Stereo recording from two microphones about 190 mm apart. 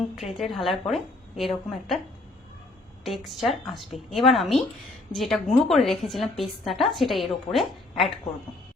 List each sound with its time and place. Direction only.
0.3 s a woman's voice: centre (ahead or behind)
3.0 s a woman's voice: centre (ahead or behind)